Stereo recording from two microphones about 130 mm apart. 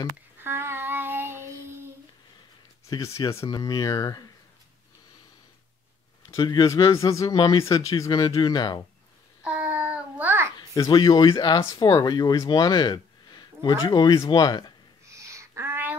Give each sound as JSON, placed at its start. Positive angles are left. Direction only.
{"t": 0.4, "sound": "child singing", "side_deg": -20}
{"t": 2.9, "sound": "speech", "side_deg": 25}
{"t": 6.3, "sound": "speech", "side_deg": 35}
{"t": 9.4, "sound": "babbling", "side_deg": -10}
{"t": 10.7, "sound": "speech", "side_deg": 30}
{"t": 15.0, "sound": "a sound", "side_deg": -25}